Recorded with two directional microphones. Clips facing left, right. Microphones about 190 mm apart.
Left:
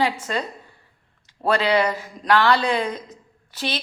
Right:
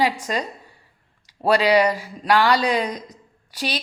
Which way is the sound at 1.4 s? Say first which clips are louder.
Right 3 dB; 15° right (ahead or behind).